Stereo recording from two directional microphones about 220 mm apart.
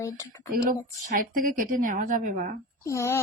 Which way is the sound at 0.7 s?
40° right (ahead or behind).